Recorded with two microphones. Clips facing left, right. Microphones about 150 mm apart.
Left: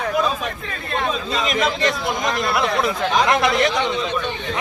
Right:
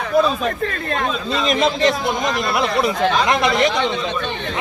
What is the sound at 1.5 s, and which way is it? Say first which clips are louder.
A man's voice: right 5 dB; 25° right (ahead or behind).